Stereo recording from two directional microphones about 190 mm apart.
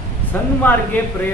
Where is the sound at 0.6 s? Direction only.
10° left (ahead or behind).